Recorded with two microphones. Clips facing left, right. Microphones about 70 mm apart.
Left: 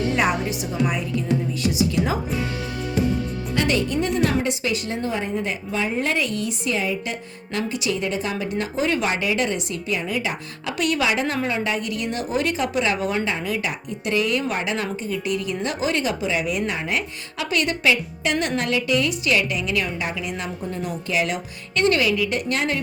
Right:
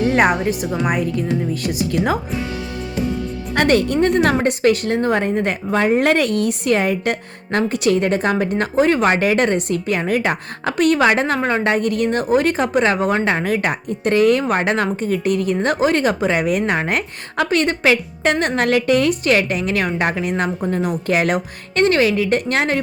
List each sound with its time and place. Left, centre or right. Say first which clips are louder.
0.1 s a woman's voice: right 6 dB; right
3.5 s a woman's voice: right 7 dB; right
21.8 s speech: right 4 dB; right